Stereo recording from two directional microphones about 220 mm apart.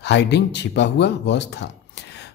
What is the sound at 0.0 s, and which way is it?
Speech, 50° left (ahead or behind).